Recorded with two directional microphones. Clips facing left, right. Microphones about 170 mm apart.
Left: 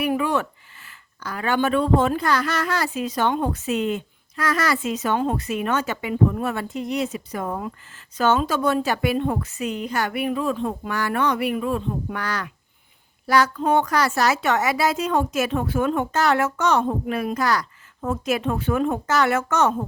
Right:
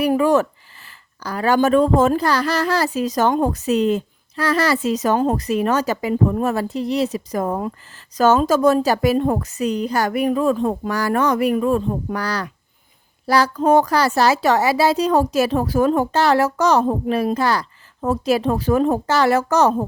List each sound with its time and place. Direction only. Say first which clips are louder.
0.0 s speech: right 6 dB; 40° right (ahead or behind)